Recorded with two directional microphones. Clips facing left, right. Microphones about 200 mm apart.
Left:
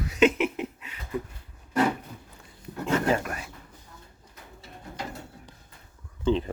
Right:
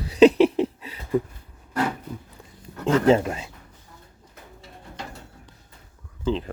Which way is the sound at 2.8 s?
25° right (ahead or behind).